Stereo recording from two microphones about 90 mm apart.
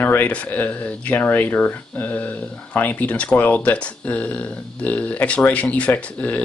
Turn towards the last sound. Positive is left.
turn(degrees=15)  # may be behind; listen again after turning